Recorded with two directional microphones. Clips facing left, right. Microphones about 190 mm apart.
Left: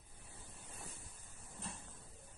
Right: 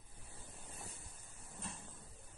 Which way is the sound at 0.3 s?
35° right (ahead or behind).